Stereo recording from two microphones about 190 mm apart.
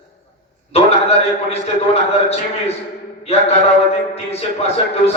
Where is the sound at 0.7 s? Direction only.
35° left (ahead or behind).